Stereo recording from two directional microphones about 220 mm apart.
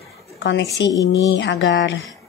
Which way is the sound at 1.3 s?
55° left (ahead or behind).